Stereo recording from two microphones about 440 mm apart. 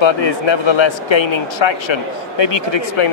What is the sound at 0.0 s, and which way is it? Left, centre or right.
Speech, left.